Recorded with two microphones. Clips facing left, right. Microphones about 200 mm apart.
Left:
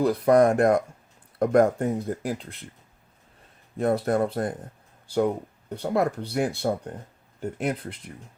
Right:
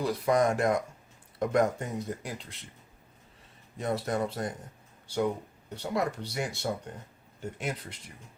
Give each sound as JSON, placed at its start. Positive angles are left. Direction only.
{"t": 0.0, "sound": "speech", "side_deg": 55}
{"t": 3.8, "sound": "speech", "side_deg": 55}